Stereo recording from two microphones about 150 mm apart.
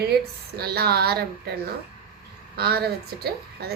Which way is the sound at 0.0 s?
90° right.